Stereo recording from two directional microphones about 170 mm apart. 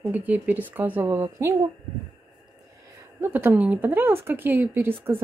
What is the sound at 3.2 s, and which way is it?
Speech, 10° right (ahead or behind).